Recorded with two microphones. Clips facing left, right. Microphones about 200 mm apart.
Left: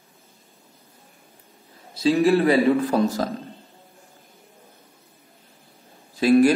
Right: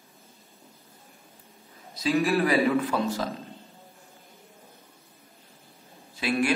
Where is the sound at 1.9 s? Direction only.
30° left (ahead or behind).